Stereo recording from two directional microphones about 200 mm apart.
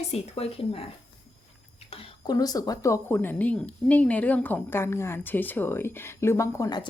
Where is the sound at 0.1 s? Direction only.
30° left (ahead or behind).